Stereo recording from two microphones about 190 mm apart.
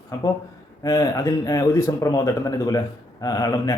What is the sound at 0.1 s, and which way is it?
Speech, 20° left (ahead or behind).